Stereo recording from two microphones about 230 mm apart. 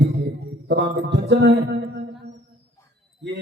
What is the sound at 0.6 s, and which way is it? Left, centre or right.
A man's voice, right.